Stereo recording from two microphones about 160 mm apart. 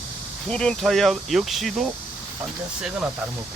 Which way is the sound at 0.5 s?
5° left (ahead or behind).